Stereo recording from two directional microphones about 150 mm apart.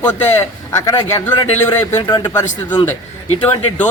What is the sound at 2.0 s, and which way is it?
Speech, 30° left (ahead or behind).